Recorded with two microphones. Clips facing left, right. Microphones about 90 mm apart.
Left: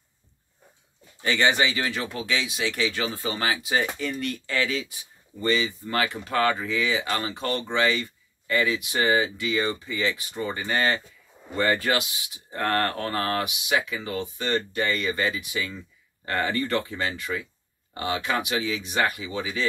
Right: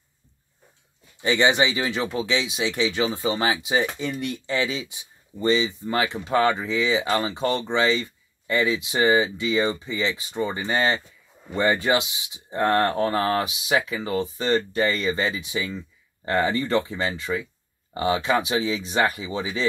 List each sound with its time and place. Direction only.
1.2 s speech: 20° right (ahead or behind)